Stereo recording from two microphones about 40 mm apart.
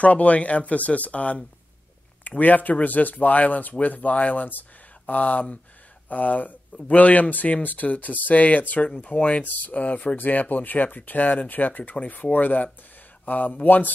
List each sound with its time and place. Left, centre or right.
0.0 s speech: left
8.8 s speech: left
9.4 s speech: left